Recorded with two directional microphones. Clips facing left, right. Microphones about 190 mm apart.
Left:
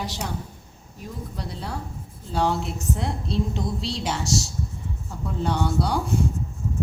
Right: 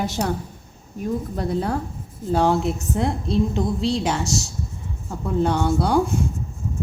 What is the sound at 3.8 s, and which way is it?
Speech, 50° right (ahead or behind).